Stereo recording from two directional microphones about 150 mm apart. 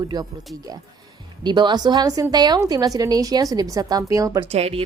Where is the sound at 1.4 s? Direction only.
30° right (ahead or behind).